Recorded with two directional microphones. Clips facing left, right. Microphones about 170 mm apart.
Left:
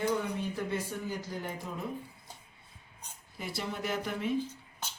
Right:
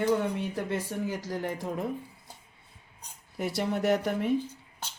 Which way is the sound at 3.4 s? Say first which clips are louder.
Right 8 dB; 75° right (ahead or behind).